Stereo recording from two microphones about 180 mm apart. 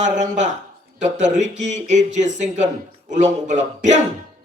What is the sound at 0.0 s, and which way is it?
A man's voice, 40° right (ahead or behind).